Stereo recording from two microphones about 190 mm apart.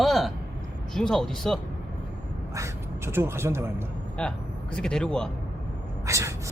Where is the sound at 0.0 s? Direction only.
Centre (ahead or behind).